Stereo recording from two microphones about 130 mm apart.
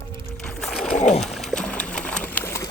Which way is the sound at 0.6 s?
5° left (ahead or behind).